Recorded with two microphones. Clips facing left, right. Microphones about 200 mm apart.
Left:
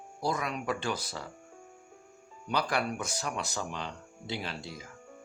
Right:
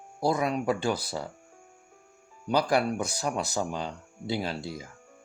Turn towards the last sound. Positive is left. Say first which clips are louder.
# right 6 dB
turn(degrees=-35)  # may be behind; listen again after turning